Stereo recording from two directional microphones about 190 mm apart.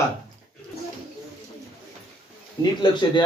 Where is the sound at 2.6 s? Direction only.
25° left (ahead or behind).